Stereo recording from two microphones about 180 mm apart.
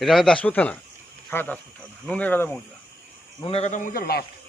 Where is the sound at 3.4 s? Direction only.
30° left (ahead or behind); by 4.2 s 60° left (ahead or behind).